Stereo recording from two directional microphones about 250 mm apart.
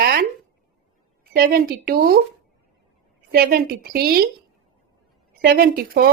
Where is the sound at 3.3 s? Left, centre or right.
Right.